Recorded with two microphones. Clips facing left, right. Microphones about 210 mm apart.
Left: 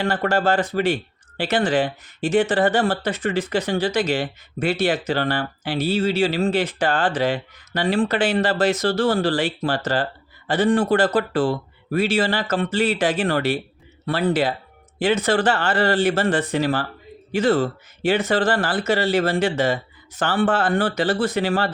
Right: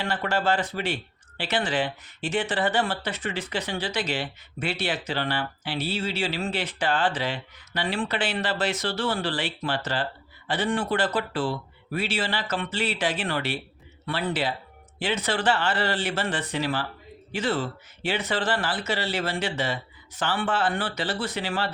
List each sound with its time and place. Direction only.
0.0 s speech: 45° left (ahead or behind)